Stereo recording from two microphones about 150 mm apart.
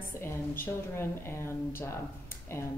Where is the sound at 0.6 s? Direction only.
15° left (ahead or behind).